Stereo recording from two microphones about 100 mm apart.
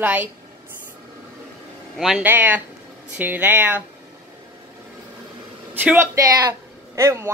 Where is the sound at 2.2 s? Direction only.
20° right (ahead or behind).